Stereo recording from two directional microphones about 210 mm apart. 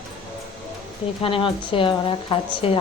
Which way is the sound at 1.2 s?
25° left (ahead or behind).